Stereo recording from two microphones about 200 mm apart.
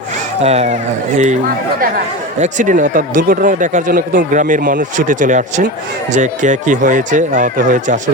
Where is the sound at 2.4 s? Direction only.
40° right (ahead or behind).